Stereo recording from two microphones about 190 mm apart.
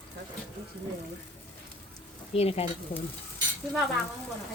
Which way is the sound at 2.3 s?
30° left (ahead or behind).